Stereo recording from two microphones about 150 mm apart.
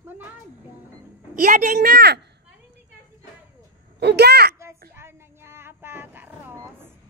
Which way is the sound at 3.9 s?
90° right.